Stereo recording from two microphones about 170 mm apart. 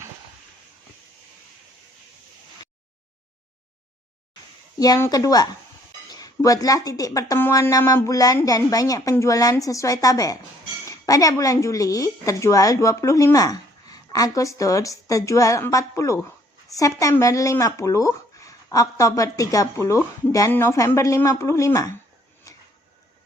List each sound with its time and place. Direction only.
4.8 s a woman's voice: 20° left (ahead or behind)